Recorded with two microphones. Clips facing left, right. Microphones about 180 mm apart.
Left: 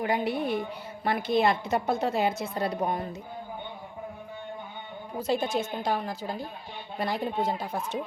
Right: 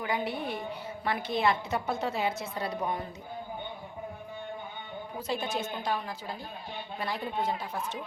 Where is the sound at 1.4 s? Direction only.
45° left (ahead or behind).